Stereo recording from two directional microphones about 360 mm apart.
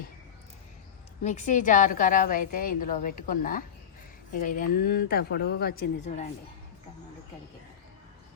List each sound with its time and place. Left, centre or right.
1.2 s a woman's voice: centre